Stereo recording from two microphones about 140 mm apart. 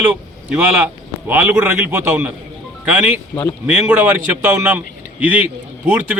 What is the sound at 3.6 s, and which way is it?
Speech, 10° right (ahead or behind).